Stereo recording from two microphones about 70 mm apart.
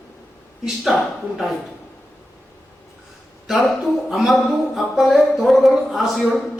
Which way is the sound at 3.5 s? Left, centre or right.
Centre.